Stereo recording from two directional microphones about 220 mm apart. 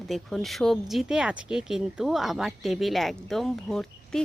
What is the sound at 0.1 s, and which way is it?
Speech, centre (ahead or behind).